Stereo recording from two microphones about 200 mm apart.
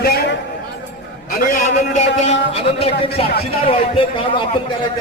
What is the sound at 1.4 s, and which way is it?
A man's voice, 40° left (ahead or behind).